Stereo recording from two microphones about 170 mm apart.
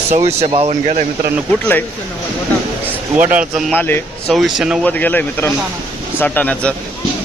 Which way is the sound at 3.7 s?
10° left (ahead or behind).